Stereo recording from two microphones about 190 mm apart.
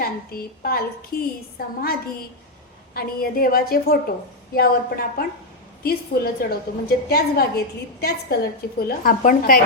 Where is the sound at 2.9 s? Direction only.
50° left (ahead or behind).